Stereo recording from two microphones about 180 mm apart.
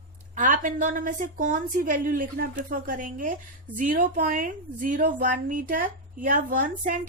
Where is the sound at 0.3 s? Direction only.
45° right (ahead or behind).